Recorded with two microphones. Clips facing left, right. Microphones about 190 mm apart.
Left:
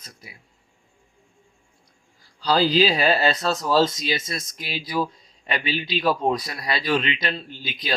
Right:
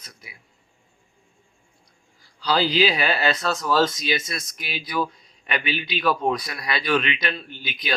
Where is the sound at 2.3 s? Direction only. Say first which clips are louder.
Left 2 dB; 40° left (ahead or behind).